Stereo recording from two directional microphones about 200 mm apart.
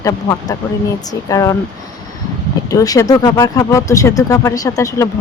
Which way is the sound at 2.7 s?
15° left (ahead or behind).